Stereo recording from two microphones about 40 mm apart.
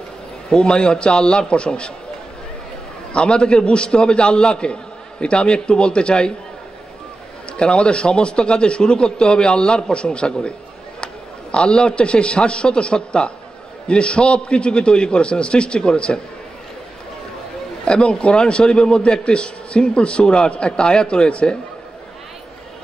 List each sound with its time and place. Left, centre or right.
0.5 s a man's voice: left
3.1 s a man's voice: left
7.5 s a man's voice: left
11.5 s a man's voice: left
17.8 s a man's voice: left